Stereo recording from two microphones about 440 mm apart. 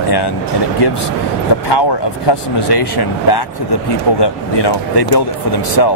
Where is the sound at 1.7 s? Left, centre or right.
Left.